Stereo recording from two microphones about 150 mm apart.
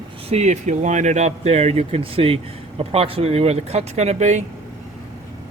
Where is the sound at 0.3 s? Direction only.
50° right (ahead or behind).